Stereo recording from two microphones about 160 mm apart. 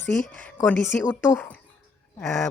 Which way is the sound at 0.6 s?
10° left (ahead or behind).